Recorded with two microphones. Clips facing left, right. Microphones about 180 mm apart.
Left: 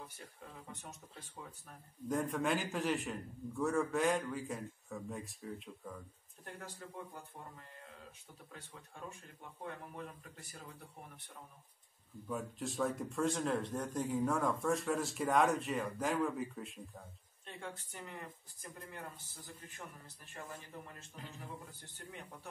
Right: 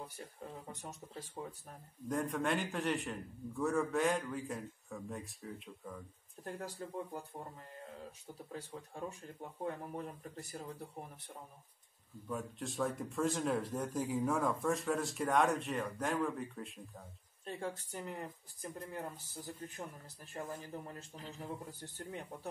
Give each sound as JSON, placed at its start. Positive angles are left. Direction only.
{"t": 0.7, "sound": "speech", "side_deg": -40}
{"t": 2.0, "sound": "a man's voice", "side_deg": 0}
{"t": 8.5, "sound": "speech", "side_deg": -35}
{"t": 12.3, "sound": "a man's voice", "side_deg": 0}
{"t": 17.5, "sound": "speech", "side_deg": -35}